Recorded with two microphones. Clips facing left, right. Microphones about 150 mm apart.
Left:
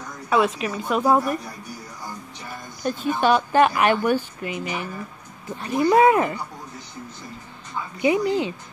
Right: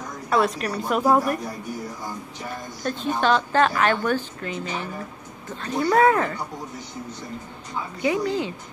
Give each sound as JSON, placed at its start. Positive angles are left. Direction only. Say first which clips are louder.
{"t": 0.3, "sound": "a woman's voice", "louder": "left 1 dB", "side_deg": 5}
{"t": 2.8, "sound": "a woman's voice", "louder": "left 2 dB", "side_deg": 5}
{"t": 8.0, "sound": "a woman's voice", "louder": "left 3 dB", "side_deg": 20}